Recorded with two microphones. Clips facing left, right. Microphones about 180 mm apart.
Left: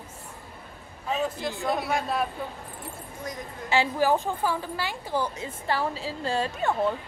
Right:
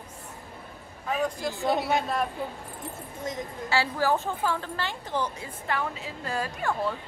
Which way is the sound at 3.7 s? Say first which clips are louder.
Left 3 dB; 15° left (ahead or behind).